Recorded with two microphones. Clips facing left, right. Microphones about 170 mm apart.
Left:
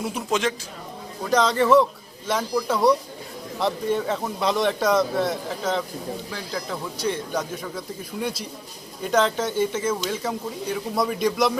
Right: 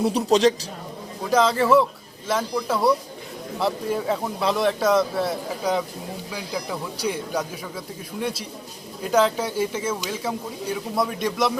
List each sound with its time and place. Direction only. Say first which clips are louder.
0.0 s a man's voice: right 7 dB; 35° right (ahead or behind)
1.2 s a man's voice: right 1 dB; 5° right (ahead or behind)
9.0 s speech: right 1 dB; 5° right (ahead or behind)